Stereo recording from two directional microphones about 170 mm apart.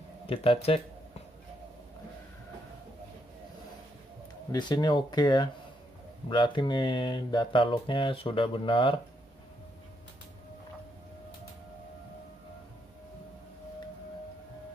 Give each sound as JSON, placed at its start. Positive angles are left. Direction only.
{"t": 0.3, "sound": "speech", "side_deg": 35}
{"t": 4.5, "sound": "speech", "side_deg": 25}